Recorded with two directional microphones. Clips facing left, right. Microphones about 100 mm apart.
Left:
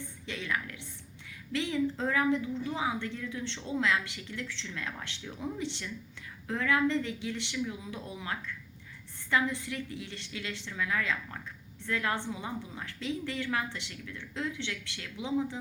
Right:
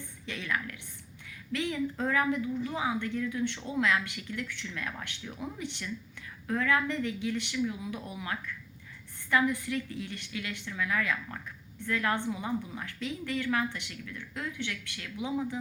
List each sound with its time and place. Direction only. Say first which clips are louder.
0.3 s a woman's voice: right 1 dB; 20° left (ahead or behind)